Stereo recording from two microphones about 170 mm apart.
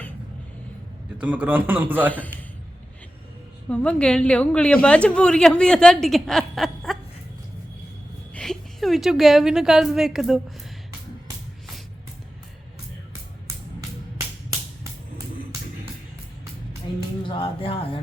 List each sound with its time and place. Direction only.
1.2 s a man's voice: 10° right (ahead or behind)
3.7 s a woman's voice: 5° left (ahead or behind)
8.3 s a woman's voice: 5° left (ahead or behind)
17.2 s speech: 30° left (ahead or behind)